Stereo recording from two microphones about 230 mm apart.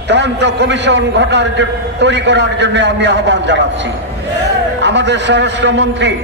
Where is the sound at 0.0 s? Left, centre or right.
Right.